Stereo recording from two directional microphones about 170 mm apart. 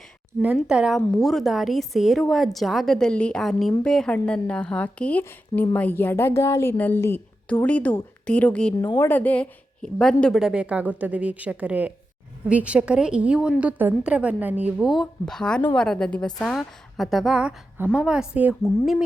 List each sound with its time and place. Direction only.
0.7 s a woman's voice: 5° right (ahead or behind)